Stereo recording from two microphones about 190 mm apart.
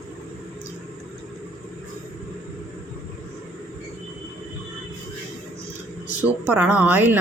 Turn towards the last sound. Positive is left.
turn(degrees=-10)  # may be behind; listen again after turning